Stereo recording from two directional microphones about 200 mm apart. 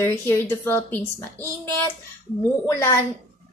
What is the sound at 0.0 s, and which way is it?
A woman's voice, 10° left (ahead or behind).